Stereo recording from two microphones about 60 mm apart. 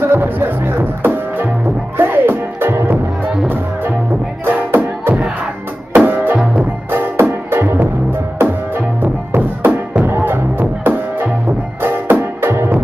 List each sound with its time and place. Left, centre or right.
0.0 s music: right
4.5 s music: right